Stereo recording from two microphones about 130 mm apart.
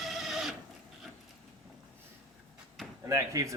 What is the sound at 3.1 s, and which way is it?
Speech, 25° right (ahead or behind).